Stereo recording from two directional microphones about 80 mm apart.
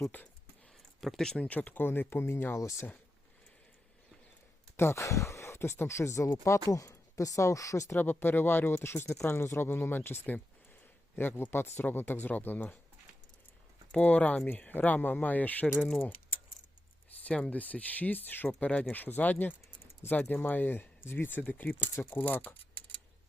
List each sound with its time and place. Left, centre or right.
1.0 s speech: centre; by 2.6 s left
2.6 s speech: left
4.8 s speech: left
7.9 s speech: left
13.9 s speech: centre
17.2 s speech: centre